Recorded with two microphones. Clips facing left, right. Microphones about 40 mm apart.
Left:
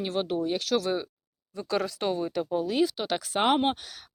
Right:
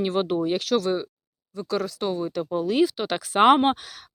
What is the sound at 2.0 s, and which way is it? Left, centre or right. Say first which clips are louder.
Speech: right 1 dB; centre.